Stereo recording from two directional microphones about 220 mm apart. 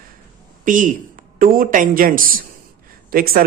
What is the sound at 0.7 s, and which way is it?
Speech, 35° right (ahead or behind).